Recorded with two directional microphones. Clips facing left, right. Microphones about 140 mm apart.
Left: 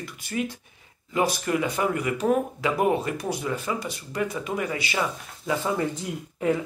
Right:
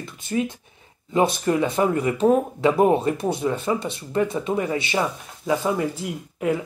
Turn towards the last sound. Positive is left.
turn(degrees=-5)  # may be behind; listen again after turning